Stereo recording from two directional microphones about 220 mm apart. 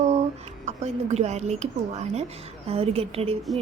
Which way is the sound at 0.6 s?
30° right (ahead or behind).